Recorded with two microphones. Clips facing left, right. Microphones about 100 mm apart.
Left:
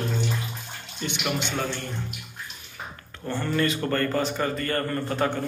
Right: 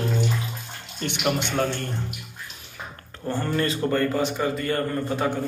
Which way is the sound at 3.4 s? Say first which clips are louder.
Left 1 dB; 30° right (ahead or behind).